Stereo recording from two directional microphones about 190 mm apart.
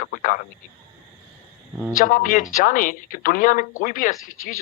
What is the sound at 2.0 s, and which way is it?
A man's voice, 45° left (ahead or behind).